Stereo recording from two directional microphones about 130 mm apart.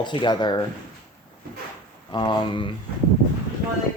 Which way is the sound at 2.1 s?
35° left (ahead or behind).